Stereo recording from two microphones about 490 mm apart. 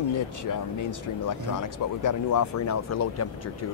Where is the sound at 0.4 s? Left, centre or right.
Left.